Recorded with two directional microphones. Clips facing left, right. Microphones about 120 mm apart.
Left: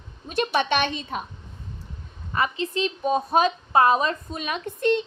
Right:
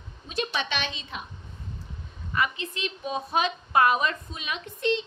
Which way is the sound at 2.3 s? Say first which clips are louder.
Left 4 dB; 35° left (ahead or behind).